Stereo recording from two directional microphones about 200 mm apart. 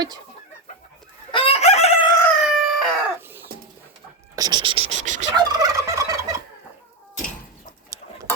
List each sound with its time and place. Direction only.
1.3 s chicken: 30° left (ahead or behind)
2.4 s chicken: centre (ahead or behind)
3.2 s a sound: 10° right (ahead or behind)
4.4 s speech: 20° right (ahead or behind)
4.9 s gobble: 35° right (ahead or behind)
5.4 s fowl: 20° right (ahead or behind)